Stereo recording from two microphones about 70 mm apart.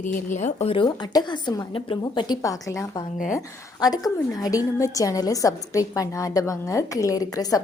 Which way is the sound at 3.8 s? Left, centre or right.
Left.